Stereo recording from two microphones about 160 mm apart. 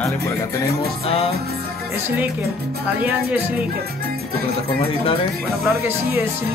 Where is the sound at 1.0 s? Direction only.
40° left (ahead or behind).